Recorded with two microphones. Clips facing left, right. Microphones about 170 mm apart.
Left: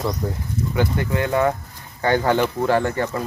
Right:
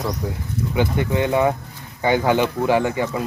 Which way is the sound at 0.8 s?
20° right (ahead or behind).